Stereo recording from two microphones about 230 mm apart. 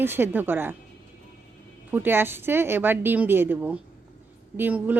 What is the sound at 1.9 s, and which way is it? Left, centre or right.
Speech, centre.